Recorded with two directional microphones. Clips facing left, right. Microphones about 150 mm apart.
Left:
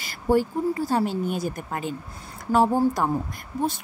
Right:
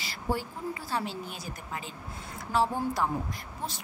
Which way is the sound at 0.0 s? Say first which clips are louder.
Left 11 dB; 50° left (ahead or behind).